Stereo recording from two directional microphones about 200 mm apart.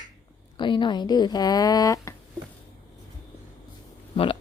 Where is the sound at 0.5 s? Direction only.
25° left (ahead or behind).